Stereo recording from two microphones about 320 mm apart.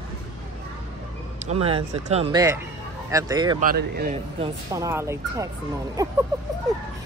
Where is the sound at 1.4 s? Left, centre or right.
Centre.